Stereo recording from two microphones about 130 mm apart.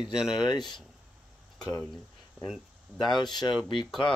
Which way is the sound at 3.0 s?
35° left (ahead or behind).